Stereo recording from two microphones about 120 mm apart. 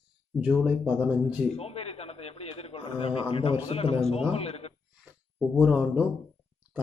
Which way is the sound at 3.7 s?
55° left (ahead or behind).